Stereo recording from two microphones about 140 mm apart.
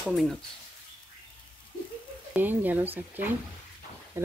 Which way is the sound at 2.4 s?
15° right (ahead or behind).